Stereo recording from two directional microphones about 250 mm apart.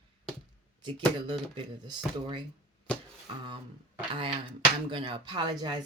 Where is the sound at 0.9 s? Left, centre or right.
Centre.